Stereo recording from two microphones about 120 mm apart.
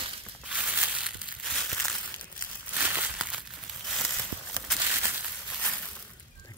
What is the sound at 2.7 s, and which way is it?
Crumpling, 15° right (ahead or behind).